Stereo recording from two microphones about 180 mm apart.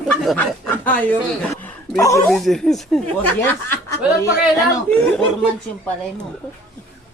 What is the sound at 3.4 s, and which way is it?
Speech, 15° left (ahead or behind).